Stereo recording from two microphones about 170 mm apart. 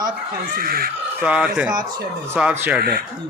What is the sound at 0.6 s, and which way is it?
Speech, 60° right (ahead or behind).